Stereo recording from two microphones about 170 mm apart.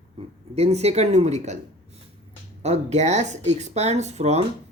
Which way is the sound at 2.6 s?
40° right (ahead or behind).